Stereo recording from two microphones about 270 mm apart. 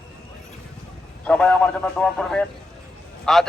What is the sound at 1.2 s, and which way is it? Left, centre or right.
A man's voice, centre.